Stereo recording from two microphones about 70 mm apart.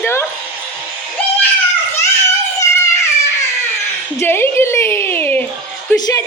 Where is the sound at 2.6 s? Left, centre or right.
Left.